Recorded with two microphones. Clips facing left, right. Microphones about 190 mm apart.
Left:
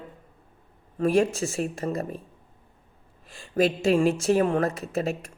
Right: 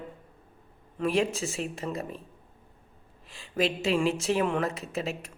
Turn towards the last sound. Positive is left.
turn(degrees=50)  # may be behind; listen again after turning